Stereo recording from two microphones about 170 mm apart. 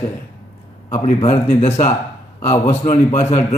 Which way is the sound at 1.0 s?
35° left (ahead or behind).